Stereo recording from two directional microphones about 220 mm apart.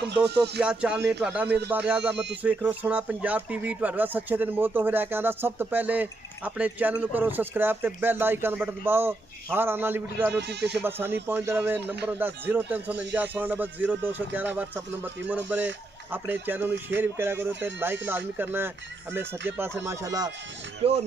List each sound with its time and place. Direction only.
0.6 s music: 5° right (ahead or behind)
1.2 s speech: 5° right (ahead or behind)
10.3 s speech: 50° right (ahead or behind)
10.8 s speech: 10° right (ahead or behind)
11.8 s speech: 50° right (ahead or behind)
12.1 s speech: 10° right (ahead or behind)
20.8 s speech: 25° right (ahead or behind)